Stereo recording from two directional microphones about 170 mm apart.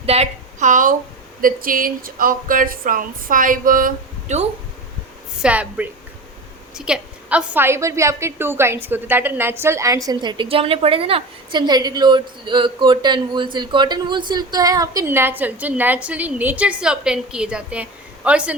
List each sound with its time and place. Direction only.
0.0 s a woman's voice: 40° right (ahead or behind)
5.4 s a woman's voice: 5° right (ahead or behind)